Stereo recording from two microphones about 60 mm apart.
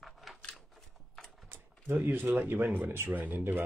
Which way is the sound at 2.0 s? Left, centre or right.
Right.